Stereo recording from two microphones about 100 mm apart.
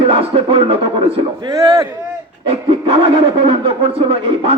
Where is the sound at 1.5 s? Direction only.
35° right (ahead or behind).